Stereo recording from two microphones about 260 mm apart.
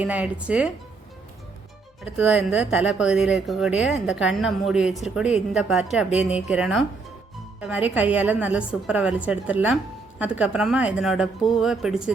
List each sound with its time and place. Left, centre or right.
0.0 s speech: centre
2.1 s speech: centre